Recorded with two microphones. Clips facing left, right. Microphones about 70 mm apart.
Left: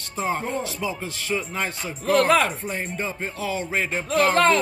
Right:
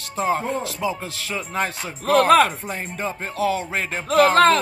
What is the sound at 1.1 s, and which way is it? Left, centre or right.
Speech, right.